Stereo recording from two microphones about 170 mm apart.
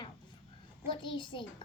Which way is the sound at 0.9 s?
30° left (ahead or behind).